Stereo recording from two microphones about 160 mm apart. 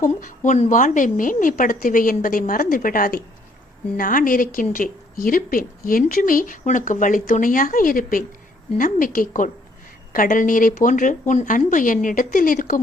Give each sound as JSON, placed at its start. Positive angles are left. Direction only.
{"t": 0.0, "sound": "a woman's voice", "side_deg": 55}